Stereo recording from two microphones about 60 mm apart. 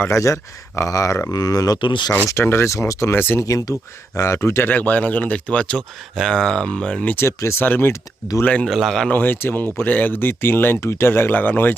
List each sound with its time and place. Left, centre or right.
0.1 s speech: left
1.3 s speech: left
2.4 s speech: left
2.6 s speech: left
3.1 s speech: left
3.4 s speech: left
4.1 s speech: left
4.6 s speech: left
7.3 s speech: left
7.6 s speech: left
8.6 s a man's voice: centre
9.0 s speech: left
10.8 s speech: left